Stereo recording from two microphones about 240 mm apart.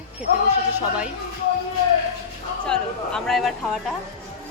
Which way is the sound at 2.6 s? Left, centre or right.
Centre.